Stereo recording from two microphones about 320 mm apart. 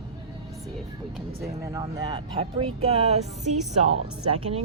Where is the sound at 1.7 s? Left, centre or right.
Centre.